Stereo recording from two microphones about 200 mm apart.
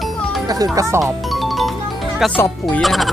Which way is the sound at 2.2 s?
5° left (ahead or behind).